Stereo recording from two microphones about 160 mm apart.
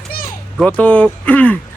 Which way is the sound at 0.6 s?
10° left (ahead or behind).